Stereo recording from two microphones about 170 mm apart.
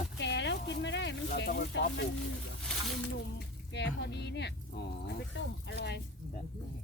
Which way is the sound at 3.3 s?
85° left.